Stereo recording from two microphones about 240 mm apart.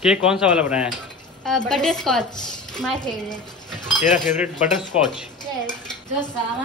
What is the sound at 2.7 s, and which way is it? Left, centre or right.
Speech, centre.